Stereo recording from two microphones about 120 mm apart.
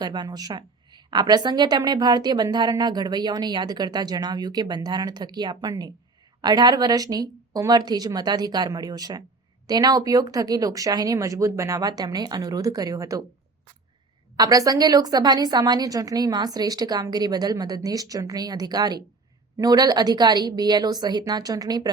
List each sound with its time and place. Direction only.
0.0 s a woman's voice: 35° right (ahead or behind)
14.3 s a woman's voice: 30° right (ahead or behind)